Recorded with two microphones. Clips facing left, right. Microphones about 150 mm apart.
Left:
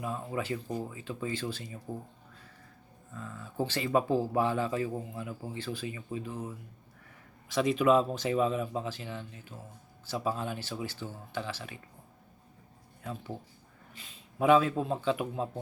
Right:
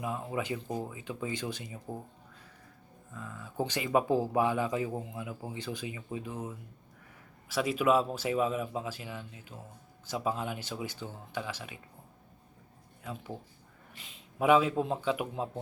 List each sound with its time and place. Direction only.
0.0 s speech: 15° right (ahead or behind)
3.2 s speech: 10° right (ahead or behind)
14.3 s speech: 10° right (ahead or behind)